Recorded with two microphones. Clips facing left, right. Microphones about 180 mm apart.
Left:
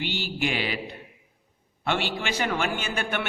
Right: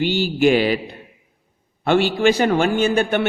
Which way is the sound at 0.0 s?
40° right (ahead or behind).